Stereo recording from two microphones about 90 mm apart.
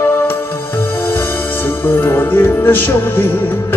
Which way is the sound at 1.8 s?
25° left (ahead or behind).